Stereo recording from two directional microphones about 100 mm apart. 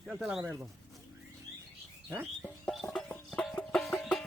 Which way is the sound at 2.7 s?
5° left (ahead or behind).